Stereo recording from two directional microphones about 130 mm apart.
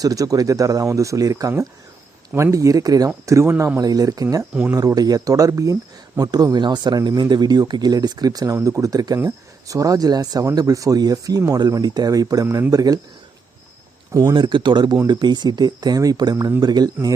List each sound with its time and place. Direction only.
0.0 s speech: 25° right (ahead or behind)
14.1 s speech: 25° right (ahead or behind)
14.3 s speech: 35° right (ahead or behind)